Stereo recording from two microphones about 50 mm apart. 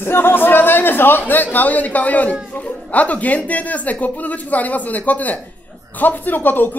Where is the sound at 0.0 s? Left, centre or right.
Left.